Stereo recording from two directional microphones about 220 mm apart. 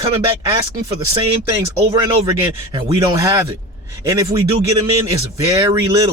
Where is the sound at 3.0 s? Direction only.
15° right (ahead or behind).